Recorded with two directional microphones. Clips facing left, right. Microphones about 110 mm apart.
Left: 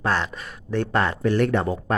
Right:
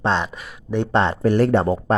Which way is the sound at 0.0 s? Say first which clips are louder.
Right 3 dB; 20° right (ahead or behind).